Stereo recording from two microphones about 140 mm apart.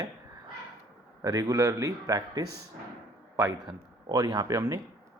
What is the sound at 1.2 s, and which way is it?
A man's voice, 25° right (ahead or behind).